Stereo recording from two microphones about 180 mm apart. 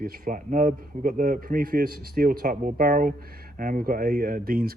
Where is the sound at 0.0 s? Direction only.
45° right (ahead or behind).